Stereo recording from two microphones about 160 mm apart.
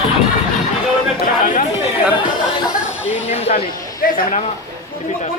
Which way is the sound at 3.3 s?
40° left (ahead or behind).